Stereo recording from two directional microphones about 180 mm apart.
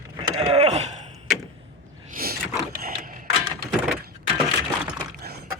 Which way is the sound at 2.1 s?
55° right (ahead or behind).